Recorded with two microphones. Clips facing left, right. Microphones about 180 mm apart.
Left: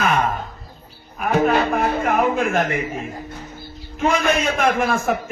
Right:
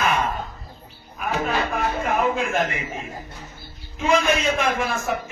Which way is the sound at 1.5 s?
60° left (ahead or behind).